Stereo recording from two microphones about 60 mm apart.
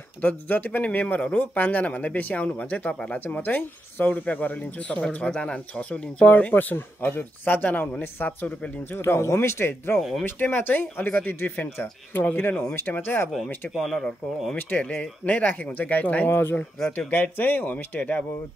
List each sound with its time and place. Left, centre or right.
0.2 s speech: left
2.9 s speech: centre
3.3 s speech: left
9.0 s speech: left
9.9 s speech: centre
10.2 s speech: left
13.7 s speech: centre
14.9 s speech: left
16.3 s speech: left